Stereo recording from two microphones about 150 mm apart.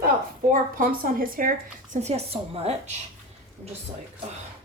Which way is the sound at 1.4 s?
65° right (ahead or behind).